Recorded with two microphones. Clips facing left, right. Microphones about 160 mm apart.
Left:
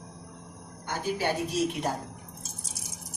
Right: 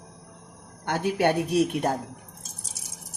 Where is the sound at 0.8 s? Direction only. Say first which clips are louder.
Right 6 dB; 65° right (ahead or behind).